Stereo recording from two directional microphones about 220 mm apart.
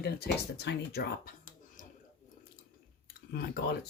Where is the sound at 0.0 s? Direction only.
50° left (ahead or behind).